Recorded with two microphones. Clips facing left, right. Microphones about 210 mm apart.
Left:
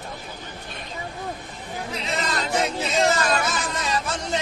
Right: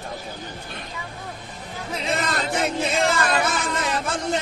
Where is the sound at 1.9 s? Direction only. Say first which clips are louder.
Right 3 dB; 50° right (ahead or behind).